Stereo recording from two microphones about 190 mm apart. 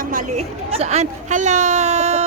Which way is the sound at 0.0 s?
45° right (ahead or behind).